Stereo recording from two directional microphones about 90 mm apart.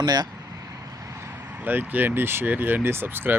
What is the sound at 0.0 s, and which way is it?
Speech, 50° right (ahead or behind).